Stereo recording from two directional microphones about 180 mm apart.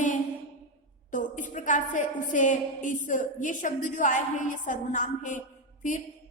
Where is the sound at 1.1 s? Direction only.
45° left (ahead or behind).